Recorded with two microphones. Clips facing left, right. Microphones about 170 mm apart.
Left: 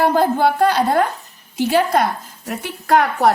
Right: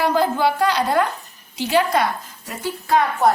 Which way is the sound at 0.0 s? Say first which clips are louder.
Left 3 dB; 55° left (ahead or behind).